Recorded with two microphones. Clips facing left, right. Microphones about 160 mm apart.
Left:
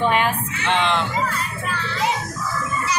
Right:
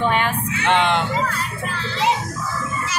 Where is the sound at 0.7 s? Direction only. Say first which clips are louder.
Right 3 dB; 55° right (ahead or behind).